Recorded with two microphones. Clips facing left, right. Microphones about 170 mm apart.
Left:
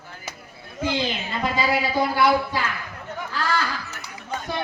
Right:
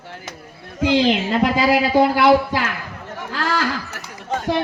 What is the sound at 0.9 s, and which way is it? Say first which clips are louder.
Speech: right 12 dB; 85° right.